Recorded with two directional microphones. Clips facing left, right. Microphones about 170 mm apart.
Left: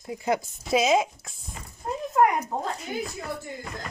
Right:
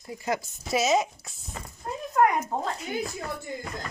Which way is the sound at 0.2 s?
15° left (ahead or behind).